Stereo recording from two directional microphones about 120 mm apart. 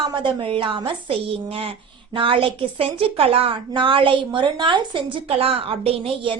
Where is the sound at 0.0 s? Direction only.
40° right (ahead or behind).